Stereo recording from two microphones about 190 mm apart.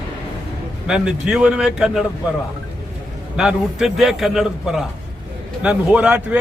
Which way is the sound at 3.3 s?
5° right (ahead or behind).